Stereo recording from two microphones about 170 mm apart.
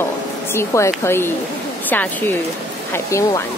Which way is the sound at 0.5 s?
15° left (ahead or behind).